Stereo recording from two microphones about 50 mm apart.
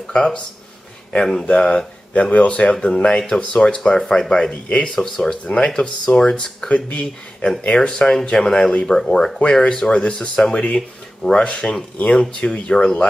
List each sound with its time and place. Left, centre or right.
0.0 s speech: centre
2.3 s speech: left
4.9 s speech: centre
6.7 s speech: left